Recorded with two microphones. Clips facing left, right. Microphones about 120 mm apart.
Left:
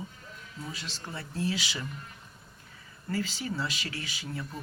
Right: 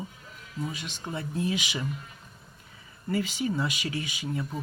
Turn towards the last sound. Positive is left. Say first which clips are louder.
# right 5 dB
turn(degrees=-15)  # may be behind; listen again after turning